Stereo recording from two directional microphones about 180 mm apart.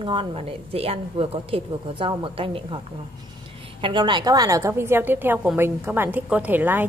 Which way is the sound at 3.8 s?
25° right (ahead or behind).